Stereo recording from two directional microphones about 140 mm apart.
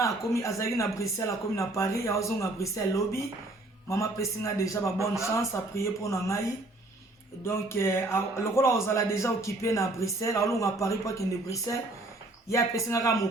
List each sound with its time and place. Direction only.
0.0 s speech: 20° left (ahead or behind)
7.4 s speech: 20° left (ahead or behind)